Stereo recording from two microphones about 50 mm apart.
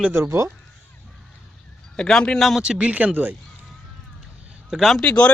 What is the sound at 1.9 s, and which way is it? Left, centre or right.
Speech, centre.